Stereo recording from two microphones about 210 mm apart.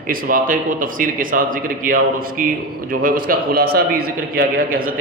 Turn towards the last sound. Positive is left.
turn(degrees=-45)  # may be behind; listen again after turning